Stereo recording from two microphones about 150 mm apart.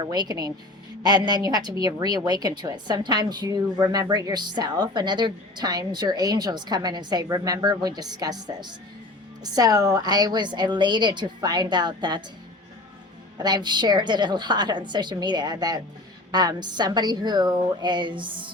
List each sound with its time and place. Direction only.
0.0 s a woman's voice: 25° right (ahead or behind)
13.4 s a woman's voice: 30° right (ahead or behind)